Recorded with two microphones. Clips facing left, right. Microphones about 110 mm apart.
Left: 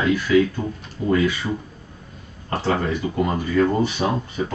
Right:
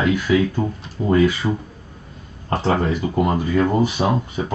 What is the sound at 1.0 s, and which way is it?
Speech, 30° right (ahead or behind).